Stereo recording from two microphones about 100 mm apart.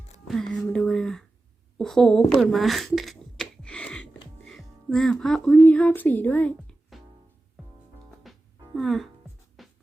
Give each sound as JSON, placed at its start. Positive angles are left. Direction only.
{"t": 0.3, "sound": "a sound", "side_deg": 5}
{"t": 5.6, "sound": "speech", "side_deg": 15}
{"t": 8.3, "sound": "music", "side_deg": 0}
{"t": 8.7, "sound": "speech", "side_deg": 0}
{"t": 9.6, "sound": "music", "side_deg": 0}